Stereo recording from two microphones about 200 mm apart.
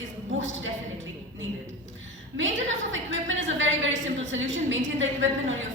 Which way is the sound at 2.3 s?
70° right (ahead or behind).